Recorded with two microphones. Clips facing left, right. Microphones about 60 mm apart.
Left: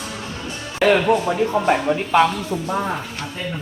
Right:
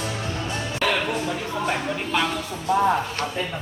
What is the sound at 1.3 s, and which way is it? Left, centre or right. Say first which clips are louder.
Speech: left 8 dB; left.